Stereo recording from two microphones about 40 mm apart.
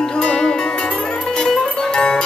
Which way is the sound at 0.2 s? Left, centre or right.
Left.